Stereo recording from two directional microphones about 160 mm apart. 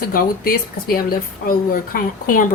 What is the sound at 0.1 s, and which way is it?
Speech, 65° left (ahead or behind).